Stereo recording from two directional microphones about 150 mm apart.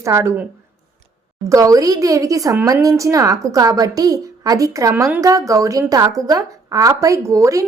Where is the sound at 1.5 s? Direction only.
20° right (ahead or behind).